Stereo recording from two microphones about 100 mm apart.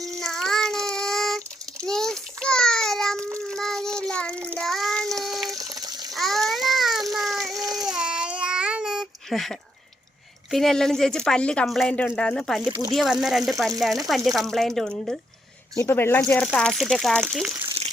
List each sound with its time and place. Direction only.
0.0 s child singing: 5° left (ahead or behind)
1.9 s a sound: 5° left (ahead or behind)
3.5 s child singing: 5° left (ahead or behind)
5.5 s water: 35° right (ahead or behind)
6.1 s water: centre (ahead or behind)
7.5 s baby cry: 35° right (ahead or behind)
7.8 s babbling: 5° right (ahead or behind)
10.5 s speech: 5° left (ahead or behind)
15.7 s speech: 30° left (ahead or behind)
16.4 s speech: 5° left (ahead or behind)